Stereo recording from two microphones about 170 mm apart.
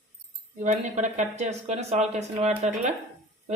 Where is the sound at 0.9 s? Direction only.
45° right (ahead or behind).